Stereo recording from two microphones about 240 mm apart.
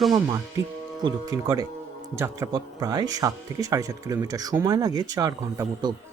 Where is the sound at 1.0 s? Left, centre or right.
Centre.